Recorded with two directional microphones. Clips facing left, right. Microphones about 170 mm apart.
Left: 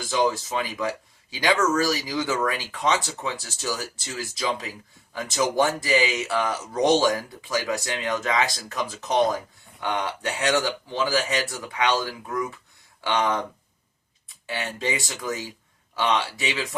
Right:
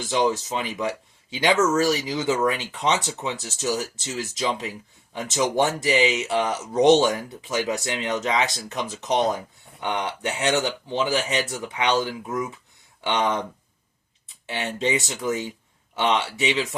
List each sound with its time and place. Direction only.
0.1 s speech: 25° right (ahead or behind)
14.4 s speech: 20° right (ahead or behind)